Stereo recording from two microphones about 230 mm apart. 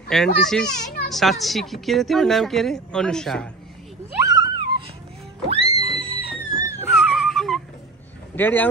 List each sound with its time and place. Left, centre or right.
0.1 s a woman's voice: centre
4.2 s a sound: centre
5.5 s music: right
6.9 s wail: centre
8.4 s speech: centre